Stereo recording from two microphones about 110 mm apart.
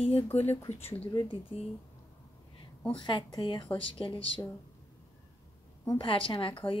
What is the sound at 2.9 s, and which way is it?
Speech, 45° left (ahead or behind).